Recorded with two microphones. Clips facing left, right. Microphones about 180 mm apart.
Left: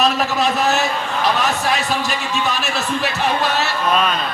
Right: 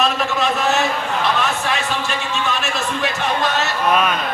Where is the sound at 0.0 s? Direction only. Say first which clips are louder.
Left 2 dB; 40° left (ahead or behind).